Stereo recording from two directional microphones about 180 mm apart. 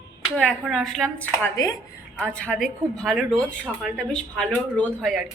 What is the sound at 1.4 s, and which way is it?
Speech, 20° left (ahead or behind).